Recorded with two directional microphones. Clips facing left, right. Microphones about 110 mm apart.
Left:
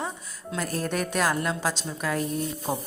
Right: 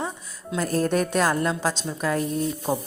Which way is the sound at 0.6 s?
35° right (ahead or behind).